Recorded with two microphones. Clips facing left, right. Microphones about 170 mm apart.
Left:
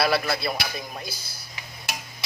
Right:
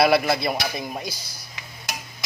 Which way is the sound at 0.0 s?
15° right (ahead or behind).